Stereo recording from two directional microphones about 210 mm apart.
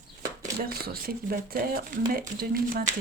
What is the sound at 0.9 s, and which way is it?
Speech, 45° right (ahead or behind).